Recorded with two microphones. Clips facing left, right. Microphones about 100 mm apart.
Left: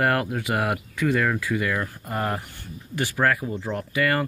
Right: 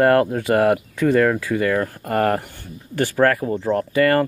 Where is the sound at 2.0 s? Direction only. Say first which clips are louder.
Right 9 dB; 60° right (ahead or behind).